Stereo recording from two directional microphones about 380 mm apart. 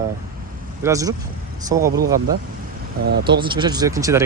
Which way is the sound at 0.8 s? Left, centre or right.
Centre.